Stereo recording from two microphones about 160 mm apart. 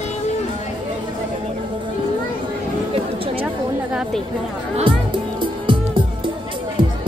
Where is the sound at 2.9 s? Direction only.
35° right (ahead or behind).